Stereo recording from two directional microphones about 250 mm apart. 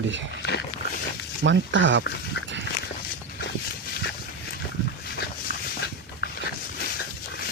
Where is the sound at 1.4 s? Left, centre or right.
Right.